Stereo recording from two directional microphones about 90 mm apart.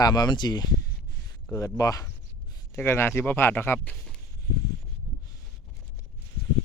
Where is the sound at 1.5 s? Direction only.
35° left (ahead or behind).